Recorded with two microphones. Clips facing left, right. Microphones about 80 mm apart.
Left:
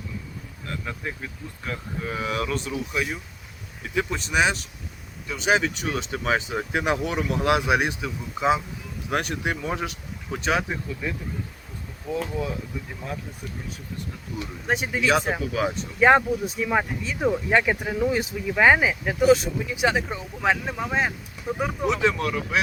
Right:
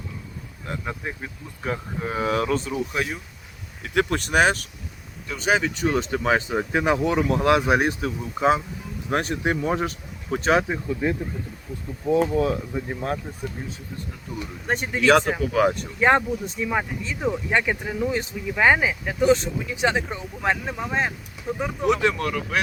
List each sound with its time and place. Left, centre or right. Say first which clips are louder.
0.7 s speech: right 2 dB; centre; by 3.1 s right
3.9 s speech: right 3 dB; right
5.3 s speech: even; centre
5.7 s speech: right 6 dB; right
10.7 s speech: right 5 dB; right
12.4 s speech: right 7 dB; right
14.4 s speech: even; centre
15.5 s speech: right 5 dB; right
16.0 s speech: left 3 dB; centre
20.0 s speech: even; centre
21.8 s speech: right 2 dB; centre